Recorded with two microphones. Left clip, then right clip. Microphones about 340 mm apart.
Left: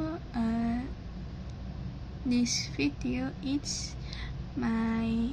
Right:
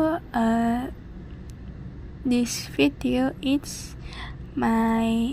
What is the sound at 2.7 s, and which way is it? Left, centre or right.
A woman's voice, right.